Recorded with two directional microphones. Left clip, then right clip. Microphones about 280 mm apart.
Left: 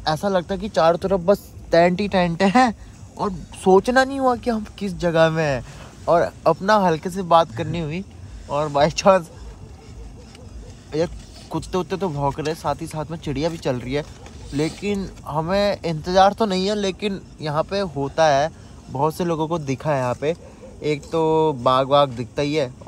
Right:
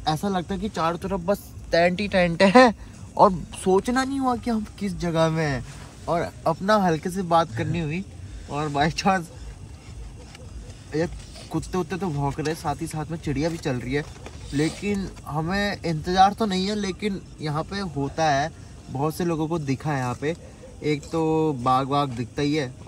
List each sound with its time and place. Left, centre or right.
0.0 s speech: centre
3.7 s speech: centre
11.5 s speech: centre